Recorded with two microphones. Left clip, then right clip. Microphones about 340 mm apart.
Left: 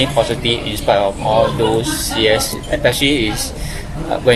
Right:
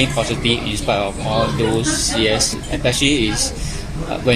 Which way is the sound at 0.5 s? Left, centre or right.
Left.